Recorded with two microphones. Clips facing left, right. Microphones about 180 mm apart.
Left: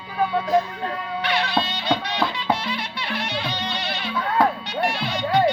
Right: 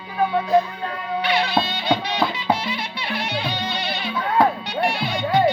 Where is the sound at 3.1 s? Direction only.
15° right (ahead or behind).